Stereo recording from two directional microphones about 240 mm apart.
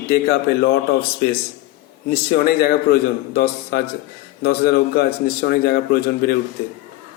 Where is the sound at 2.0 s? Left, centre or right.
Left.